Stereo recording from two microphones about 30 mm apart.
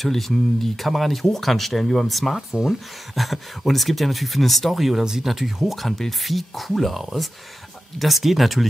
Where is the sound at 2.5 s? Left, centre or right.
Centre.